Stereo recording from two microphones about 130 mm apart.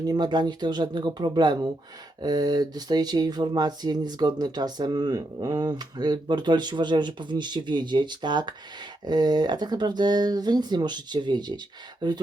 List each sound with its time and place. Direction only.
0.0 s speech: 30° right (ahead or behind)